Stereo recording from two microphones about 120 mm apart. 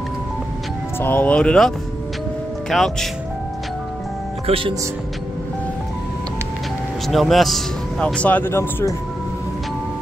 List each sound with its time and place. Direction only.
0.9 s speech: 15° left (ahead or behind)
2.7 s speech: centre (ahead or behind)
4.5 s speech: 50° right (ahead or behind)
7.1 s speech: centre (ahead or behind); by 8.9 s 20° left (ahead or behind)